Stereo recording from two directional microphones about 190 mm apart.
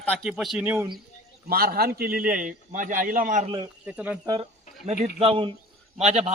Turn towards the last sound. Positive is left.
turn(degrees=-35)  # may be behind; listen again after turning